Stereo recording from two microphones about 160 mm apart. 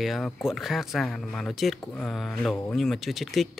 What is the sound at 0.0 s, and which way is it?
Speech, centre (ahead or behind).